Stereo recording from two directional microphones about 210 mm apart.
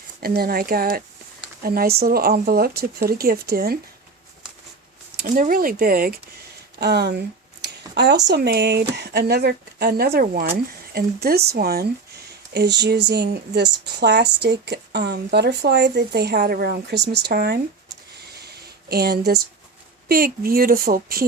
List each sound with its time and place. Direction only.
0.2 s speech: 45° right (ahead or behind)
5.1 s speech: 40° right (ahead or behind)
6.7 s a sound: 50° right (ahead or behind)
8.3 s speech: 50° right (ahead or behind)
18.4 s a sound: 50° right (ahead or behind)
20.1 s speech: 45° right (ahead or behind)